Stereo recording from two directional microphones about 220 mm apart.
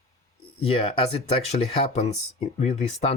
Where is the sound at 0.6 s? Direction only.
25° left (ahead or behind).